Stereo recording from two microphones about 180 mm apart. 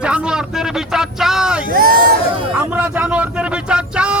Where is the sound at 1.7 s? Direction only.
55° right (ahead or behind).